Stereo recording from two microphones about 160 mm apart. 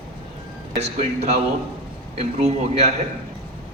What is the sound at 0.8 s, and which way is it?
A man's voice, 45° right (ahead or behind).